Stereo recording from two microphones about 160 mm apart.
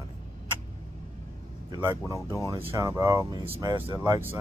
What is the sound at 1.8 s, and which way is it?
A man's voice, 20° right (ahead or behind).